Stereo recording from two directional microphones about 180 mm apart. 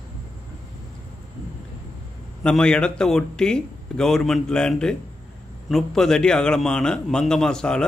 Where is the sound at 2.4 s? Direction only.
5° left (ahead or behind).